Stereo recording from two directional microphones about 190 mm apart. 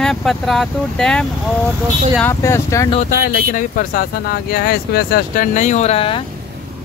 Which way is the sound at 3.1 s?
45° left (ahead or behind).